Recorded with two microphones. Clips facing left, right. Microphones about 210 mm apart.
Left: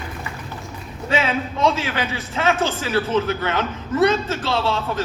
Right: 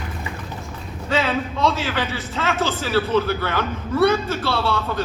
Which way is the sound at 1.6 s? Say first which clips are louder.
Left 3 dB; 15° left (ahead or behind).